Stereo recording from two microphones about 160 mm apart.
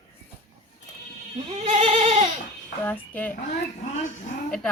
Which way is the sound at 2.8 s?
10° left (ahead or behind).